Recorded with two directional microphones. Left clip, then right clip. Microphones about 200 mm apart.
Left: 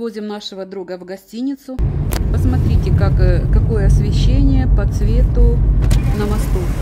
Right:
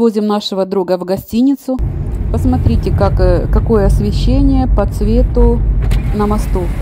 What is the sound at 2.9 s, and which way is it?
Speech, centre (ahead or behind).